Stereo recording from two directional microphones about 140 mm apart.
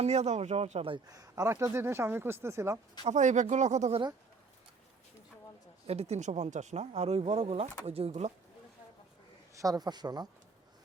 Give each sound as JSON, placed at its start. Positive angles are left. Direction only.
{"t": 0.0, "sound": "speech", "side_deg": -50}
{"t": 1.0, "sound": "speech", "side_deg": -25}
{"t": 3.1, "sound": "speech", "side_deg": -60}
{"t": 5.8, "sound": "speech", "side_deg": -45}
{"t": 9.6, "sound": "speech", "side_deg": -25}